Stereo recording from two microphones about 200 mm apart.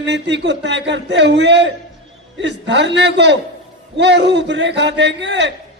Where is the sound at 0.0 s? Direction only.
60° right (ahead or behind).